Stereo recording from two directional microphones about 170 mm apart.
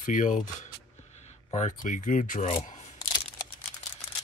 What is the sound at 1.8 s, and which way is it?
Speech, 50° left (ahead or behind).